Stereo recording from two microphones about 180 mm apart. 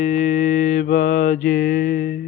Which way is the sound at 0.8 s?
45° left (ahead or behind).